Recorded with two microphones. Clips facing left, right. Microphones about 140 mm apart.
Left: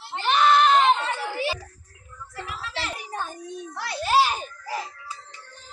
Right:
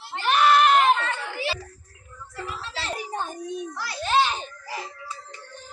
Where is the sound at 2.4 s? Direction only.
30° right (ahead or behind).